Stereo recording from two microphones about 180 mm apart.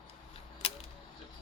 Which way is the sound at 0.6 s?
35° left (ahead or behind).